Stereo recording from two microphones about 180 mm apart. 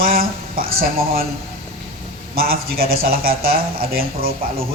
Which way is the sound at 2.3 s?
55° right (ahead or behind).